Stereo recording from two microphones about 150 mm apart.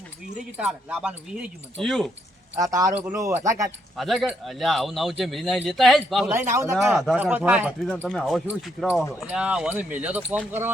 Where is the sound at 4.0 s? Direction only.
Centre (ahead or behind).